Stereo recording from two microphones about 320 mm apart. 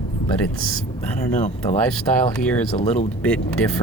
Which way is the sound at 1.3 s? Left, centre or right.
Left.